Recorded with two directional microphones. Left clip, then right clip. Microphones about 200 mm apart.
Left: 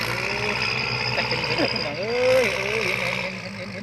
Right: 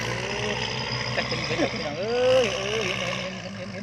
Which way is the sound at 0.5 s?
30° left (ahead or behind).